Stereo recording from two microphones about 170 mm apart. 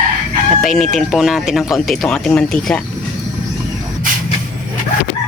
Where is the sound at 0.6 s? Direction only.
Centre (ahead or behind).